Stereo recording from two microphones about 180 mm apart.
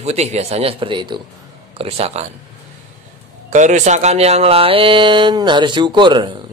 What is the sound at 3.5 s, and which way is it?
Speech, 40° right (ahead or behind).